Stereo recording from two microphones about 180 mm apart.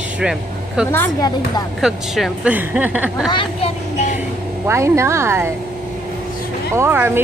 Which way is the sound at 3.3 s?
35° left (ahead or behind).